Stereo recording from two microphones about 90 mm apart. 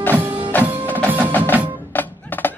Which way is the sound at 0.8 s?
20° right (ahead or behind).